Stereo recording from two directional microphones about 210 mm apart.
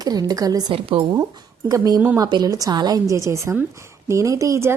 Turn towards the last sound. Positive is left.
turn(degrees=-15)  # may be behind; listen again after turning